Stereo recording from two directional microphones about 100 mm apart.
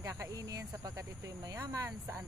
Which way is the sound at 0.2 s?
35° right (ahead or behind).